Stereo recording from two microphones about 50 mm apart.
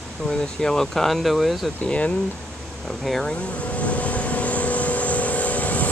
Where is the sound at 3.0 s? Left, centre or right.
Centre.